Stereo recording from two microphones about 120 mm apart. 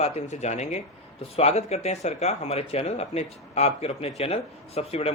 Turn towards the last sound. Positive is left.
turn(degrees=55)  # may be behind; listen again after turning